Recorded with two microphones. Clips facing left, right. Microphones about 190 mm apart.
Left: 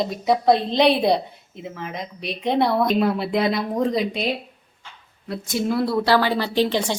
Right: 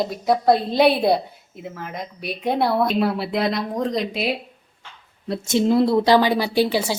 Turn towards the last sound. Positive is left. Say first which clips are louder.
# right 1 dB
turn(degrees=-10)  # may be behind; listen again after turning